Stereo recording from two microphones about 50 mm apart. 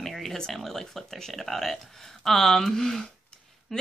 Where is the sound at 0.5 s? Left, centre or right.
Centre.